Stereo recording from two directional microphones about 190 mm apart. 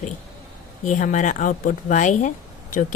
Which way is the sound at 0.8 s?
40° left (ahead or behind).